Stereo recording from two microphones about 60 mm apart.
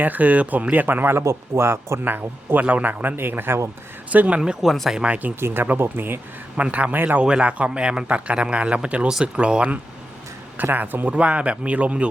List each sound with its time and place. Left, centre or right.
0.0 s speech: right
1.2 s speech: right
2.0 s a man's voice: right
4.1 s speech: right
4.4 s speech: centre
4.9 s speech: centre
5.4 s a man's voice: right
6.6 s speech: right
7.3 s speech: centre
10.6 s speech: right